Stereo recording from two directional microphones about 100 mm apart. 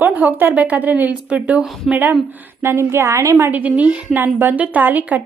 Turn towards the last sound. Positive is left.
turn(degrees=-15)  # may be behind; listen again after turning